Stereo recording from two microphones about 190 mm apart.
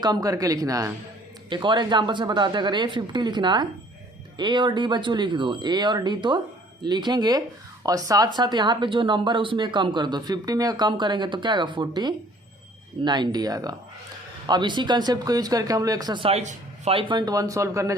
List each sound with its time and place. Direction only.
0.0 s speech: 20° right (ahead or behind)